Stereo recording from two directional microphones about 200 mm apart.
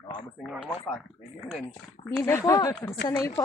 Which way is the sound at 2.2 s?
15° left (ahead or behind).